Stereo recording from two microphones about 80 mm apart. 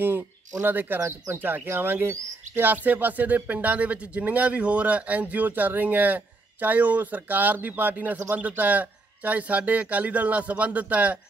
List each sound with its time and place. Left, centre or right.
0.6 s speech: right